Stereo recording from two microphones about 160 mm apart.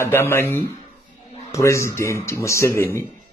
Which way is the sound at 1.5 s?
20° left (ahead or behind).